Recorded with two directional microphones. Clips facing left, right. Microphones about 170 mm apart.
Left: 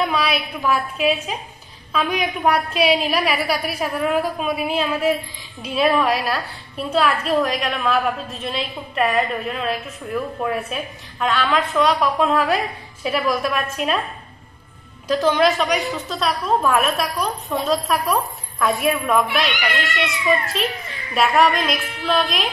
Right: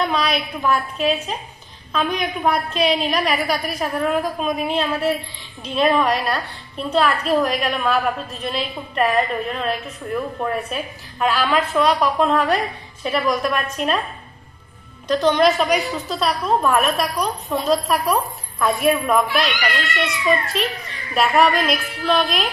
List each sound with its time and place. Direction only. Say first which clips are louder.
0.0 s a woman's voice: even; 5° left (ahead or behind)
1.0 s a woman's voice: left 1 dB; 35° right (ahead or behind)
1.9 s a woman's voice: even; 5° left (ahead or behind)
15.0 s a woman's voice: right 1 dB; 5° left (ahead or behind)
19.5 s speech: even; 20° left (ahead or behind)
19.9 s a woman's voice: right 1 dB; centre (ahead or behind)